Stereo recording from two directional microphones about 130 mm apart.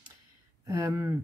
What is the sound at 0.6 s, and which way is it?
Speech, 25° right (ahead or behind).